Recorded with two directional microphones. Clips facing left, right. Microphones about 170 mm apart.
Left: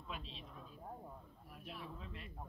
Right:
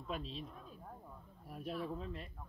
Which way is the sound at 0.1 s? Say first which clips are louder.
Right 7 dB; 40° right (ahead or behind).